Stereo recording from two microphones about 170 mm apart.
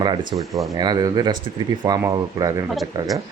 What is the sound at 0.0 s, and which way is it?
Speech, 25° right (ahead or behind).